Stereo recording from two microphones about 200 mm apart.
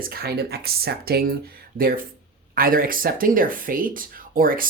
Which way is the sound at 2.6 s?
45° right (ahead or behind).